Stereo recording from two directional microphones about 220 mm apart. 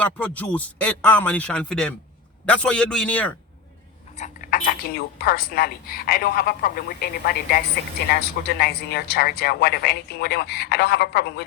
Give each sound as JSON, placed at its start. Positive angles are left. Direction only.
{"t": 0.0, "sound": "a man's voice", "side_deg": 5}
{"t": 4.2, "sound": "a woman's voice", "side_deg": 35}